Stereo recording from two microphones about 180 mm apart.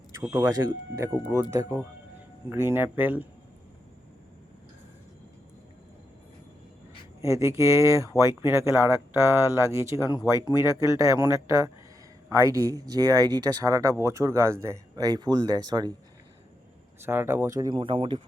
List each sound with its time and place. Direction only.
0.1 s speech: 15° right (ahead or behind)
7.2 s speech: 15° right (ahead or behind)
17.0 s speech: 10° right (ahead or behind)
17.6 s speech: 25° right (ahead or behind)